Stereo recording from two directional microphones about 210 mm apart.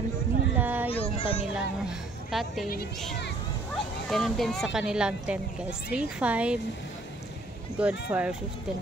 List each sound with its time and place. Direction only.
0.6 s a sound: 10° right (ahead or behind)
0.8 s children playing: 25° left (ahead or behind)
1.5 s speech: centre (ahead or behind)
4.1 s speech: centre (ahead or behind)
7.7 s speech: 5° right (ahead or behind)